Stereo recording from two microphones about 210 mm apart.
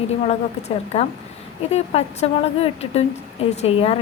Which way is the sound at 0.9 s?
30° left (ahead or behind).